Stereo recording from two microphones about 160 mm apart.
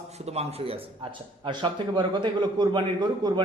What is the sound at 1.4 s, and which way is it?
A man's voice, 30° right (ahead or behind).